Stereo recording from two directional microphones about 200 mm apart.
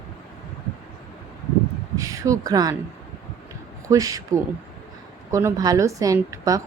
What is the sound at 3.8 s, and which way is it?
A woman's voice, 15° right (ahead or behind).